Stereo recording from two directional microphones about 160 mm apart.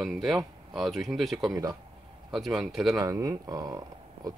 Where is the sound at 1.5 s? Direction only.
20° right (ahead or behind).